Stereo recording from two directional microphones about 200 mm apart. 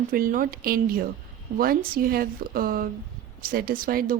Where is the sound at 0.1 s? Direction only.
45° right (ahead or behind).